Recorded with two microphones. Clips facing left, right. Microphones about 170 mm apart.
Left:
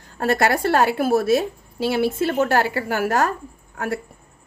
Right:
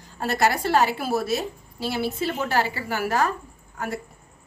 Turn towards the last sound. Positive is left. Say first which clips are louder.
# left 3 dB
turn(degrees=45)  # may be behind; listen again after turning